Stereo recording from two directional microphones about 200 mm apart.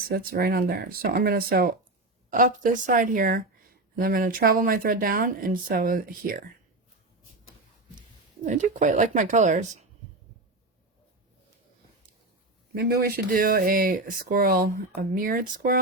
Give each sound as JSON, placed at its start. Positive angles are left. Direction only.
{"t": 0.1, "sound": "speech", "side_deg": -45}
{"t": 8.4, "sound": "speech", "side_deg": -40}
{"t": 12.7, "sound": "speech", "side_deg": -50}